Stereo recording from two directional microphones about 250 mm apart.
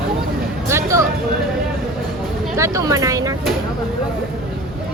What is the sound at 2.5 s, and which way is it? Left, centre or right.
Speech, centre.